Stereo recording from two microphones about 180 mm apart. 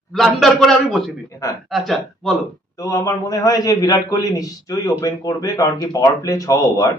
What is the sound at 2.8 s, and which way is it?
A man's voice, 20° left (ahead or behind).